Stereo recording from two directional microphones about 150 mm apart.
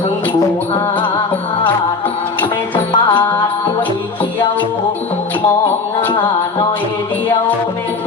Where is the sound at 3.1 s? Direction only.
30° left (ahead or behind).